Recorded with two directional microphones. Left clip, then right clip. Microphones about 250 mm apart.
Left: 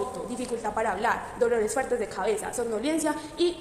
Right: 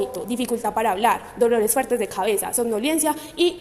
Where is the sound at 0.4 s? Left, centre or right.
Right.